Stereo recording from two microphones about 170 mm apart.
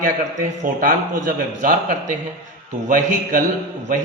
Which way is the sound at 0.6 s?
55° right (ahead or behind).